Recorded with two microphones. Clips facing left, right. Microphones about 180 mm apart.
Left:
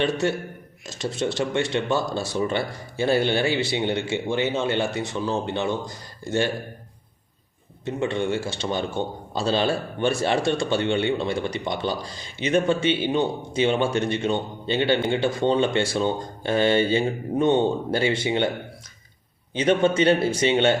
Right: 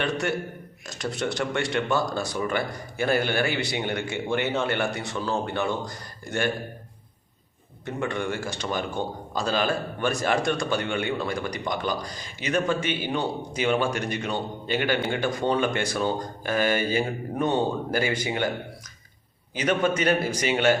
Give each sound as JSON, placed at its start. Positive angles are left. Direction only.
{"t": 0.0, "sound": "speech", "side_deg": 25}
{"t": 7.9, "sound": "speech", "side_deg": 20}
{"t": 19.5, "sound": "speech", "side_deg": 25}